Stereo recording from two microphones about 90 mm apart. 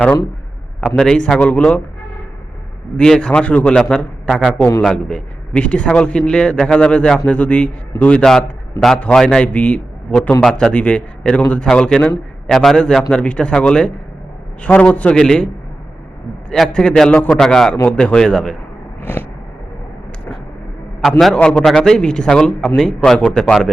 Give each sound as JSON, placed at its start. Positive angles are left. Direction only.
{"t": 0.8, "sound": "a man's voice", "side_deg": 10}
{"t": 3.0, "sound": "a man's voice", "side_deg": 10}
{"t": 8.2, "sound": "a man's voice", "side_deg": 5}
{"t": 16.5, "sound": "a man's voice", "side_deg": 10}
{"t": 19.1, "sound": "a sound", "side_deg": 25}
{"t": 21.3, "sound": "a man's voice", "side_deg": 10}